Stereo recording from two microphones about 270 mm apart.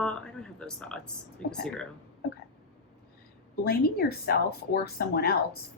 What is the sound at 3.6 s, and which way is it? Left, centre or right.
Speech, left.